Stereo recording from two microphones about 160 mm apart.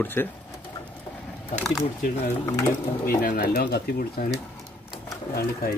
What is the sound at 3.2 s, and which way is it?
Speech, 60° left (ahead or behind).